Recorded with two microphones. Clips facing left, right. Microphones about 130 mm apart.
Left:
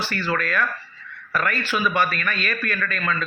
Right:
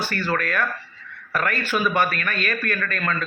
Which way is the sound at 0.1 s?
50° right (ahead or behind).